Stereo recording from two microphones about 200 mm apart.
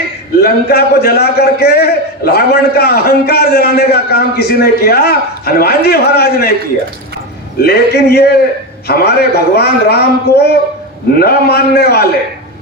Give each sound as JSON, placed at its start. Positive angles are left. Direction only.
{"t": 0.4, "sound": "a man's voice", "side_deg": 50}
{"t": 7.6, "sound": "a man's voice", "side_deg": 55}